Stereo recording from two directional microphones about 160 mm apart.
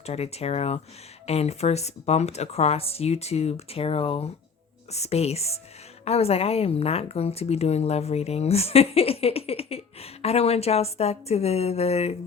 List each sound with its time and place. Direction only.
0.0 s a woman's voice: 40° left (ahead or behind)